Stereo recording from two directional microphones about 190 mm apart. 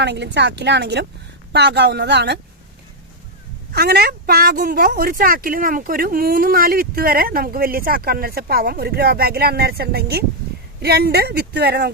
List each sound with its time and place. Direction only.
0.0 s speech: 65° right (ahead or behind)
3.7 s a woman's voice: 55° right (ahead or behind)